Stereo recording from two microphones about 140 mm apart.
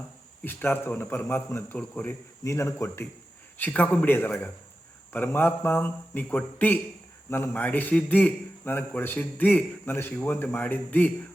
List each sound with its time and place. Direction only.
0.4 s a man's voice: 15° left (ahead or behind)